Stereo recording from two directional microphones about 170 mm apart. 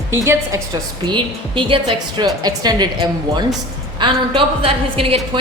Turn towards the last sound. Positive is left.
turn(degrees=-35)  # may be behind; listen again after turning